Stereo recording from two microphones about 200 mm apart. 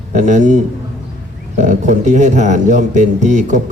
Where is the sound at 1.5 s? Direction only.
35° right (ahead or behind).